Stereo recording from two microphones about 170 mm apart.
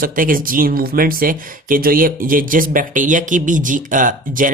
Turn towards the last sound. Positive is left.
turn(degrees=-50)  # may be behind; listen again after turning